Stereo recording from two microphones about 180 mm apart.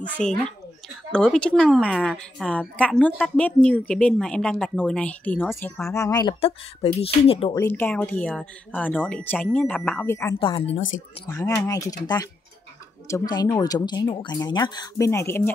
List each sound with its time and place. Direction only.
0.2 s a woman's voice: 5° left (ahead or behind)
5.9 s speech: 20° left (ahead or behind)
7.0 s speech: 30° left (ahead or behind)
7.5 s speech: 10° left (ahead or behind)
10.4 s speech: 30° left (ahead or behind)
11.6 s speech: 20° left (ahead or behind)
13.1 s speech: 20° left (ahead or behind)